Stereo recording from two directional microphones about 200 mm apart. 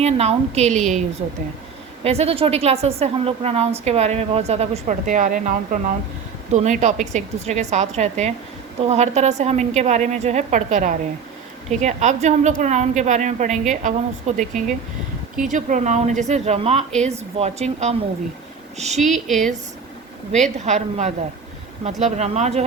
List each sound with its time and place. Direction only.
0.0 s a woman's voice: 35° right (ahead or behind)
2.0 s a woman's voice: 30° right (ahead or behind)
18.9 s speech: centre (ahead or behind)
20.4 s a woman's voice: 35° right (ahead or behind)